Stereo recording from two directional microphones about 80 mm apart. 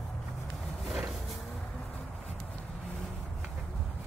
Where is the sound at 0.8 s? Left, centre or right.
Centre.